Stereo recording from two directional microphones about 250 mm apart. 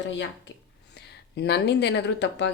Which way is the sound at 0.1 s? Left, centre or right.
Left.